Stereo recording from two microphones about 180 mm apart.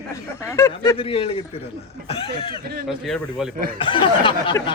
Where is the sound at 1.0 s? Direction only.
30° left (ahead or behind).